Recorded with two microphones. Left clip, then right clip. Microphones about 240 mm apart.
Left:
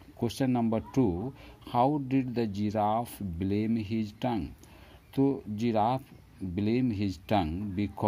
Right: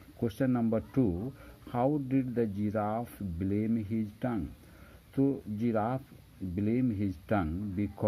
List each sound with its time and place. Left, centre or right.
0.2 s speech: left